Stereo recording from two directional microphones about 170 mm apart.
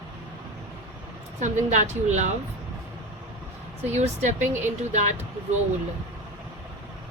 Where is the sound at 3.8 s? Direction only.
40° right (ahead or behind).